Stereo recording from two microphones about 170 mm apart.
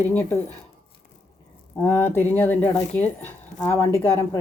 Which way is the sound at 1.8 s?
15° left (ahead or behind).